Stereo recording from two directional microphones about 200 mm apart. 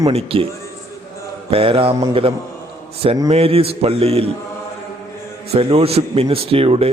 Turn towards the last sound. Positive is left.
turn(degrees=-30)  # may be behind; listen again after turning